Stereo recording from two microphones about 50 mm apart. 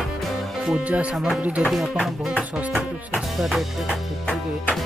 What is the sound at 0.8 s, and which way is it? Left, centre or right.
Speech, right.